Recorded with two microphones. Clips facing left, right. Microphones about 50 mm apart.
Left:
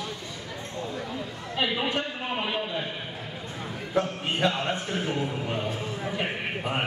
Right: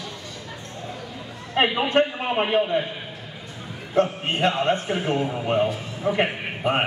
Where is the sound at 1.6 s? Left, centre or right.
Right.